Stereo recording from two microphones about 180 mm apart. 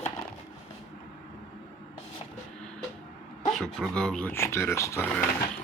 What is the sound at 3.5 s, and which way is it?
Speech, centre (ahead or behind).